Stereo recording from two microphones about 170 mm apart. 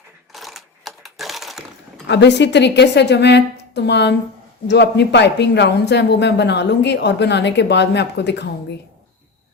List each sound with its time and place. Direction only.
0.3 s typing: centre (ahead or behind)
2.0 s speech: 90° left